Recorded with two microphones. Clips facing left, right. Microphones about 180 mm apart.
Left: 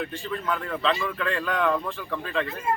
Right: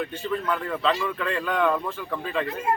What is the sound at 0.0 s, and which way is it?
Speech, centre (ahead or behind).